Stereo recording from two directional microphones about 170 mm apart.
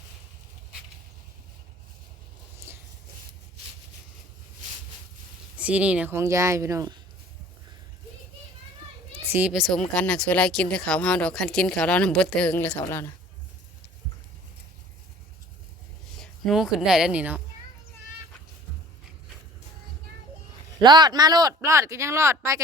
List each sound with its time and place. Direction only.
2.7 s a sound: 15° right (ahead or behind)
5.5 s speech: 10° right (ahead or behind)
9.3 s speech: 5° right (ahead or behind); by 13.1 s 15° left (ahead or behind)
16.2 s a woman's voice: centre (ahead or behind)
20.8 s speech: 25° right (ahead or behind)